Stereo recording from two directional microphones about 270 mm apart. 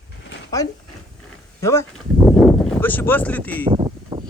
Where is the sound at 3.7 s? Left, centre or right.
Centre.